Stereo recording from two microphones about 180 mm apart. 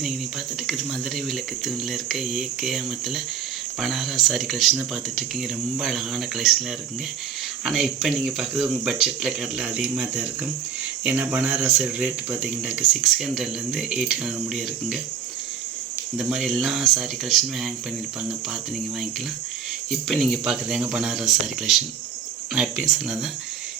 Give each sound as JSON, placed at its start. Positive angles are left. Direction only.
{"t": 0.7, "sound": "speech", "side_deg": 0}
{"t": 7.6, "sound": "speech", "side_deg": -5}
{"t": 16.1, "sound": "speech", "side_deg": 0}
{"t": 19.9, "sound": "speech", "side_deg": 0}